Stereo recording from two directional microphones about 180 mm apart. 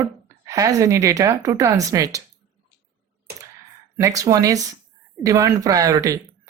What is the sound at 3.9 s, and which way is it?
Speech, 15° right (ahead or behind).